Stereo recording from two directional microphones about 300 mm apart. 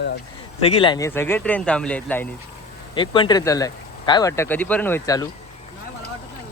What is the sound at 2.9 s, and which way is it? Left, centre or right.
Speech, centre.